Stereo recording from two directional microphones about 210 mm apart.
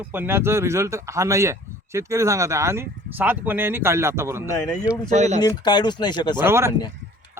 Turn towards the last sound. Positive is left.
turn(degrees=-10)  # may be behind; listen again after turning